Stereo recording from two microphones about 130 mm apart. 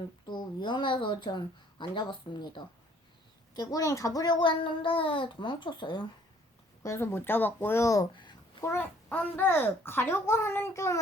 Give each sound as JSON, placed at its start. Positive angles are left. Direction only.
{"t": 0.3, "sound": "a child's voice", "side_deg": 35}
{"t": 6.8, "sound": "a child's voice", "side_deg": 20}
{"t": 8.1, "sound": "a sound", "side_deg": 35}
{"t": 8.6, "sound": "a child's voice", "side_deg": 15}